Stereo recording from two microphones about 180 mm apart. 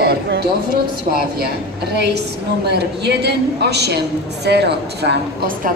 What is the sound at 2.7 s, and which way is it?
A man's voice, 65° right (ahead or behind).